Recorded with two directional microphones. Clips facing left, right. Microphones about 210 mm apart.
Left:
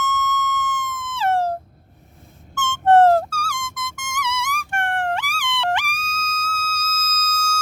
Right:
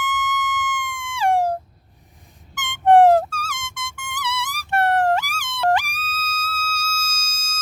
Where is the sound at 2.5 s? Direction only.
15° right (ahead or behind).